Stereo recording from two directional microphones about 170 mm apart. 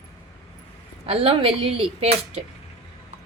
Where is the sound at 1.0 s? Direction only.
30° right (ahead or behind).